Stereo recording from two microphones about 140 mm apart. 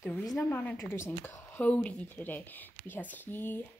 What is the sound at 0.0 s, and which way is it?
A woman's voice, 20° left (ahead or behind).